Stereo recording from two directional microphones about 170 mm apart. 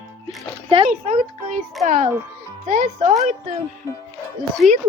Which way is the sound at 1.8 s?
50° right (ahead or behind).